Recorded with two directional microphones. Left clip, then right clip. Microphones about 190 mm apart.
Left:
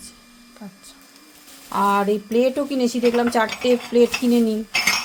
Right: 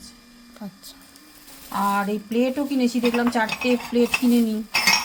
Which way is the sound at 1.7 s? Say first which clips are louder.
Left 4 dB; 35° left (ahead or behind).